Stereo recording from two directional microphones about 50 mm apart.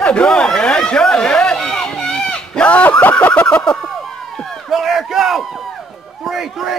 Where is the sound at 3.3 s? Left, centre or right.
Left.